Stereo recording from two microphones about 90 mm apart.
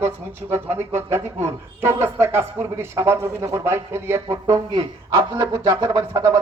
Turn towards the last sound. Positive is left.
turn(degrees=-35)  # may be behind; listen again after turning